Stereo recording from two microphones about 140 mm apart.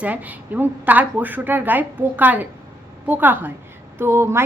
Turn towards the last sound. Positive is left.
turn(degrees=-20)  # may be behind; listen again after turning